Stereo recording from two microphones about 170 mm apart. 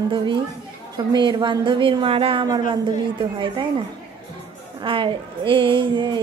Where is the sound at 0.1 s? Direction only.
30° right (ahead or behind).